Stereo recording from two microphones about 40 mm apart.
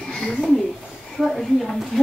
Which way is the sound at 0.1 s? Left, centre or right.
Centre.